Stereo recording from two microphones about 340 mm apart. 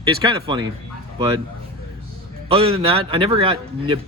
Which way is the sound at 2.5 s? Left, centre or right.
Centre.